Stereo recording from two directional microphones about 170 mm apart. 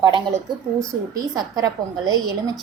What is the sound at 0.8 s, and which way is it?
A woman's voice, 20° right (ahead or behind).